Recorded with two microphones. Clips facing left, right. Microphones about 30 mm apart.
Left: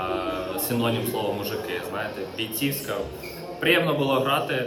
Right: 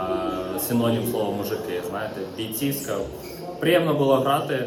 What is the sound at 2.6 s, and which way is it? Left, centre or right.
Speech, left.